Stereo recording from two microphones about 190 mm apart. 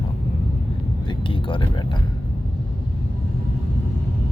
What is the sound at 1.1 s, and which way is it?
Speech, 25° left (ahead or behind).